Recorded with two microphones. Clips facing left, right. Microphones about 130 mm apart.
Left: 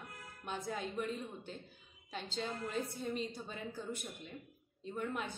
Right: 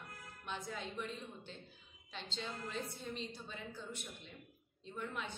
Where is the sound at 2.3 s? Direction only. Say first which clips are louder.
Left 5 dB; 45° left (ahead or behind).